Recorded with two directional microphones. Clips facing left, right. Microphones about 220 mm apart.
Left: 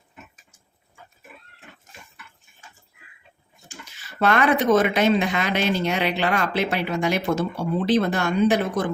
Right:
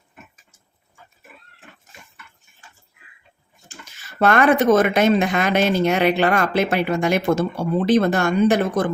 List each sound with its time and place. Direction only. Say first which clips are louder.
4.2 s speech: right 4 dB; 50° right (ahead or behind)